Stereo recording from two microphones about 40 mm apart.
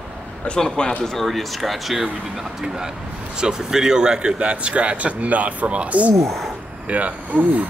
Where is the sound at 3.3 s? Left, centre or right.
Centre; by 7.7 s right.